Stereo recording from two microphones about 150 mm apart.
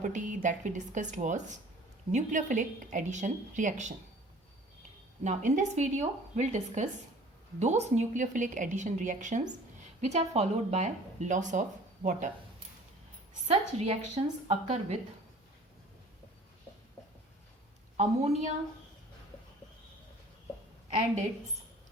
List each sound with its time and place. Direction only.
0.0 s a woman's voice: 55° right (ahead or behind)
5.2 s a woman's voice: 55° right (ahead or behind)
13.5 s speech: 45° right (ahead or behind)
17.9 s speech: 50° right (ahead or behind)